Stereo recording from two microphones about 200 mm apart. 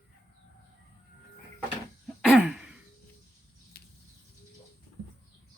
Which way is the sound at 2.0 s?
5° right (ahead or behind).